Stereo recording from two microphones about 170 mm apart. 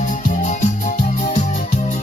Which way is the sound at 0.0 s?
50° left (ahead or behind).